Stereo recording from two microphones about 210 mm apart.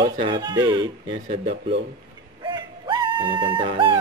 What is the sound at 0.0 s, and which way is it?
Speech, 20° right (ahead or behind).